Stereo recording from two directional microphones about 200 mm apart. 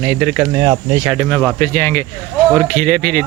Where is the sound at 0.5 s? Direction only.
20° right (ahead or behind).